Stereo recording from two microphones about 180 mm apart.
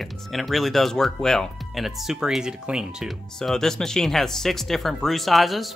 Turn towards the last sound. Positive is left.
turn(degrees=0)  # may be behind; listen again after turning